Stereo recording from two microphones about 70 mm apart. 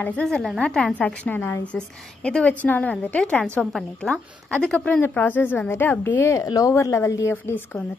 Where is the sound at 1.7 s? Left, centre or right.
Centre.